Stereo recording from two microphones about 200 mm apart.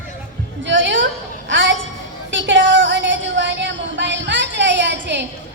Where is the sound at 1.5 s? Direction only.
70° right (ahead or behind).